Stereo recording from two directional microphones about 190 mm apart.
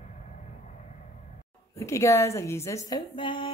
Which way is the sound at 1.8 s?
15° left (ahead or behind).